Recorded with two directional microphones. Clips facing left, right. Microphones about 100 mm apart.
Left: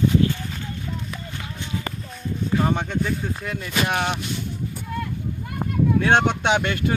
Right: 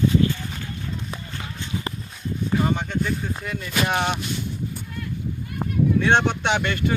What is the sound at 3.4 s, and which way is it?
Speech, centre (ahead or behind).